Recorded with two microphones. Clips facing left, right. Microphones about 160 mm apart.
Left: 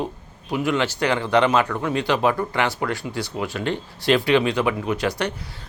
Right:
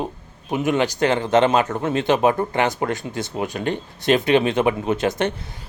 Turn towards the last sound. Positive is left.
turn(degrees=-25)  # may be behind; listen again after turning